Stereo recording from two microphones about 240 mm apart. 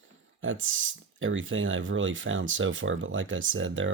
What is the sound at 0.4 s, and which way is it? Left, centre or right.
Speech, right.